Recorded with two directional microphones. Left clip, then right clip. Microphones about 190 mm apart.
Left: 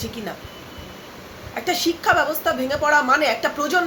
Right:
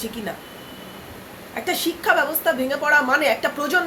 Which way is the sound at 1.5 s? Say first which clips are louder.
Left 2 dB; 15° left (ahead or behind).